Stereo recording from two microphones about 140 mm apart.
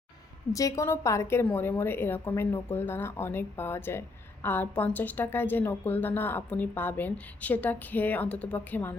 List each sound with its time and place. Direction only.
0.5 s a woman's voice: 20° left (ahead or behind)